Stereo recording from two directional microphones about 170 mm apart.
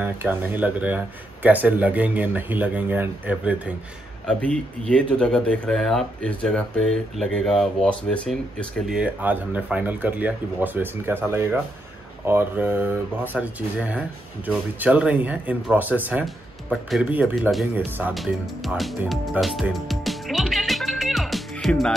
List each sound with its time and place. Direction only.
0.0 s speech: 10° right (ahead or behind)
4.3 s speech: 5° left (ahead or behind)
8.9 s speech: 10° right (ahead or behind)
17.7 s speech: 10° right (ahead or behind)
18.1 s music: centre (ahead or behind)